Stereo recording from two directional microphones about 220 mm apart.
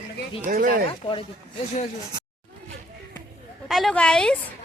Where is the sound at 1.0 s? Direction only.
25° left (ahead or behind).